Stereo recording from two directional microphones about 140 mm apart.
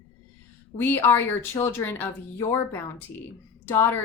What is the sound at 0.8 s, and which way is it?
A woman's voice, 15° left (ahead or behind).